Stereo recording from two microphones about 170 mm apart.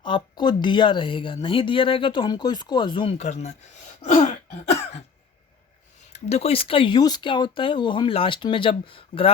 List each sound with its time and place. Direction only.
0.0 s speech: 25° left (ahead or behind)
4.0 s throat clearing: 45° left (ahead or behind)
4.7 s cough: 40° left (ahead or behind)
6.1 s speech: 40° left (ahead or behind)